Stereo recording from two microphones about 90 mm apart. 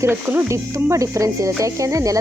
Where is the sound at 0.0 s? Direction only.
25° right (ahead or behind).